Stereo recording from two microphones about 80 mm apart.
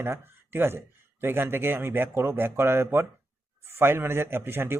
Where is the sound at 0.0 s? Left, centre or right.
Right.